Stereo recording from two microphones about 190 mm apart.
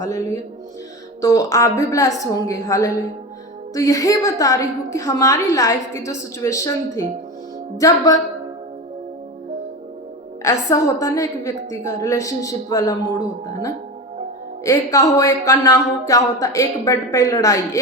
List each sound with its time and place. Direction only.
0.0 s a woman's voice: 15° left (ahead or behind)
10.4 s a woman's voice: 15° left (ahead or behind)